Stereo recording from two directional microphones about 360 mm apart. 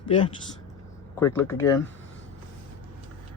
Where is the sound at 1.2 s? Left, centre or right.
Centre.